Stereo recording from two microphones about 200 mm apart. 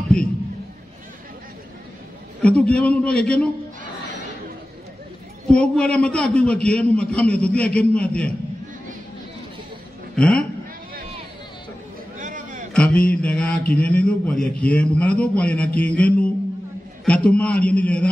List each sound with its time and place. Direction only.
2.4 s a man's voice: 5° left (ahead or behind)
5.5 s a man's voice: 5° left (ahead or behind)
10.1 s a man's voice: 5° left (ahead or behind)
12.2 s a sound: 40° right (ahead or behind)
12.7 s a man's voice: 5° left (ahead or behind)